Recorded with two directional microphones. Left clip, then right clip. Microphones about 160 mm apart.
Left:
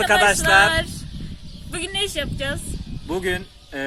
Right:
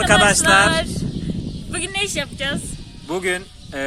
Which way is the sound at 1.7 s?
10° left (ahead or behind).